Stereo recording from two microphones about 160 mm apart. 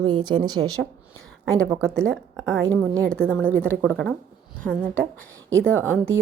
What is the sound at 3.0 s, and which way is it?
Speech, 5° left (ahead or behind).